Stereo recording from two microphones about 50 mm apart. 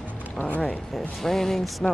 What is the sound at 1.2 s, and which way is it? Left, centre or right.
Speech, centre.